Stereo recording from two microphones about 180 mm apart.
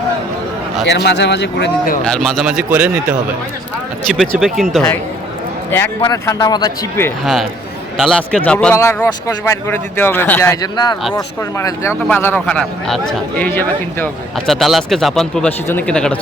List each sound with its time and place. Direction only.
0.9 s speech: 70° left (ahead or behind)
2.0 s speech: 5° left (ahead or behind)
6.0 s speech: 20° left (ahead or behind)
7.9 s speech: centre (ahead or behind)
14.4 s speech: centre (ahead or behind)